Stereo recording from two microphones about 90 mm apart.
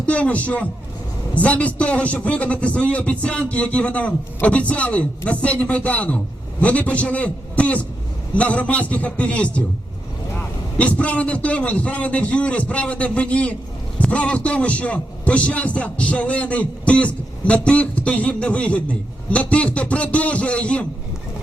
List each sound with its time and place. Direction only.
0.0 s a man's voice: 15° left (ahead or behind)